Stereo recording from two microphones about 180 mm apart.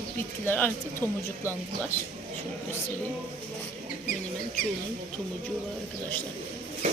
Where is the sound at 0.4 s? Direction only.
10° left (ahead or behind).